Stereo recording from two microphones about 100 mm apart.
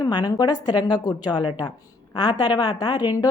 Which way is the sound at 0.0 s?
45° left (ahead or behind).